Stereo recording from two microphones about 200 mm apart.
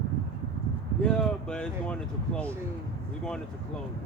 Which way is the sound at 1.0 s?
5° left (ahead or behind).